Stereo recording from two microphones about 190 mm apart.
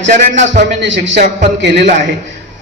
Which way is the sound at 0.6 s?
70° right (ahead or behind).